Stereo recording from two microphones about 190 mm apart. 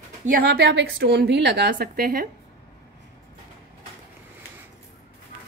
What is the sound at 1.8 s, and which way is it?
Speech, 50° right (ahead or behind).